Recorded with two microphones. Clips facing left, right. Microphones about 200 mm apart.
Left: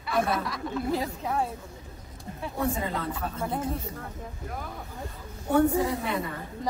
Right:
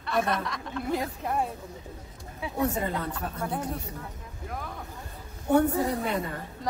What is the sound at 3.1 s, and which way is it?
Speech, 5° left (ahead or behind).